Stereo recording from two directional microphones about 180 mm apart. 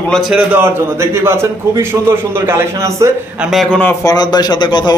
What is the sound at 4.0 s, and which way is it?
Speech, 20° left (ahead or behind).